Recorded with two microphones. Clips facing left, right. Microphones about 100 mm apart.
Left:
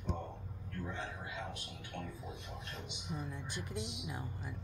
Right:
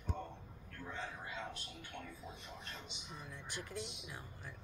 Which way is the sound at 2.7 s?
20° left (ahead or behind).